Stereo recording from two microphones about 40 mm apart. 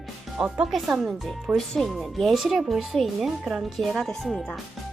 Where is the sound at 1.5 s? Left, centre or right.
Centre.